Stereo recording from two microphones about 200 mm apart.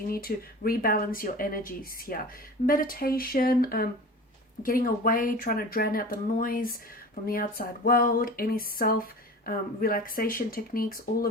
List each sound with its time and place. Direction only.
0.1 s speech: 45° left (ahead or behind)